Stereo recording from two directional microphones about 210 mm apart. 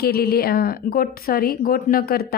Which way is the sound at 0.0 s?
45° left (ahead or behind).